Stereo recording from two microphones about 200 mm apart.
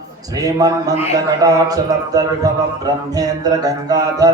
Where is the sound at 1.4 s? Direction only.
20° right (ahead or behind).